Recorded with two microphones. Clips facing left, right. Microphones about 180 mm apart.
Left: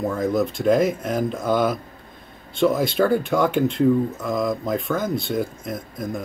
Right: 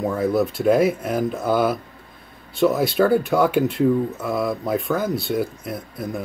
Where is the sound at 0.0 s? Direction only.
5° right (ahead or behind).